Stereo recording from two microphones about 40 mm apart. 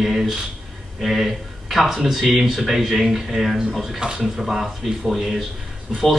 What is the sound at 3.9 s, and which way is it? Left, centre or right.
Speech, centre.